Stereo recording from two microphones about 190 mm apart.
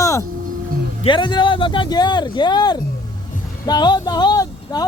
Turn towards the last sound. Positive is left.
turn(degrees=20)  # may be behind; listen again after turning